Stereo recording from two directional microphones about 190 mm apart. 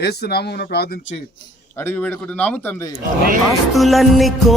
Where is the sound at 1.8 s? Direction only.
10° left (ahead or behind).